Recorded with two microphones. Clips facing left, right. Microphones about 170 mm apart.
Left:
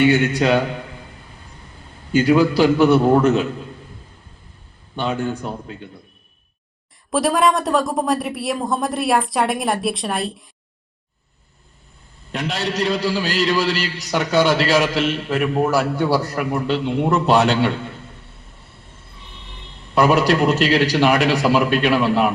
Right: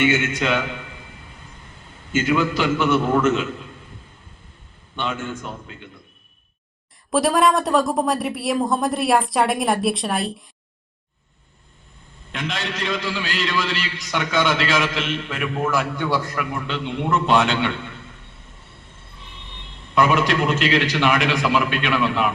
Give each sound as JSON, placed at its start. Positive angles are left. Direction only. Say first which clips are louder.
{"t": 0.0, "sound": "a man's voice", "louder": "left 5 dB", "side_deg": 40}
{"t": 2.1, "sound": "a man's voice", "louder": "left 6 dB", "side_deg": 35}
{"t": 4.9, "sound": "a man's voice", "louder": "left 5 dB", "side_deg": 40}
{"t": 7.1, "sound": "speech", "louder": "even", "side_deg": 0}
{"t": 12.3, "sound": "a man's voice", "louder": "left 4 dB", "side_deg": 40}
{"t": 20.0, "sound": "a man's voice", "louder": "left 3 dB", "side_deg": 35}